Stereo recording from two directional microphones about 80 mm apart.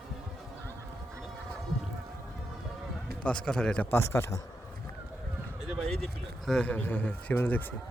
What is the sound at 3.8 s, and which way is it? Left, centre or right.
Speech, left.